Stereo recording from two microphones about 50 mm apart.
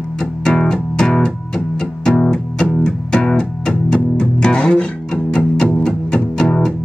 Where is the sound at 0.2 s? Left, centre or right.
Centre.